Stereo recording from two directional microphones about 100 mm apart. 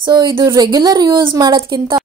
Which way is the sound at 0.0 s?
50° right (ahead or behind).